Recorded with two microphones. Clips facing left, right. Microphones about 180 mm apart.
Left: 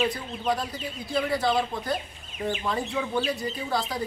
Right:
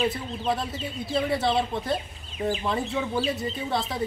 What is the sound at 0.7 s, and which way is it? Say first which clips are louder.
Speech: right 1 dB; 25° right (ahead or behind).